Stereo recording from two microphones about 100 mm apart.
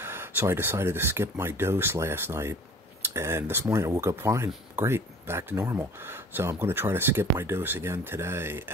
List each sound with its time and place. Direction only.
0.0 s speech: 25° right (ahead or behind)